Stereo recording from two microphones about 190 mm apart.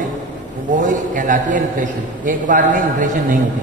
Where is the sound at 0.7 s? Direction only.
40° right (ahead or behind).